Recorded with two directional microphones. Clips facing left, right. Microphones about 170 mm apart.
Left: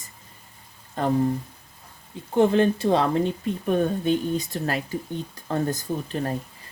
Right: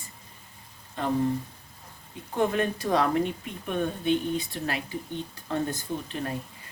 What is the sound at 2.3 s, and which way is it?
A woman's voice, 30° left (ahead or behind).